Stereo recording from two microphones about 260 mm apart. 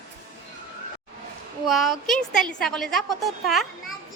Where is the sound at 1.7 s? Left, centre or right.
Centre.